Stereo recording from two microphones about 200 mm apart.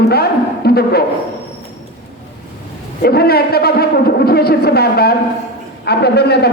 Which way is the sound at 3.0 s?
50° left (ahead or behind).